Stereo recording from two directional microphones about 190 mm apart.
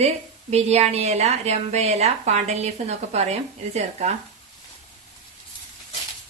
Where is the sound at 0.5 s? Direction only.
35° right (ahead or behind).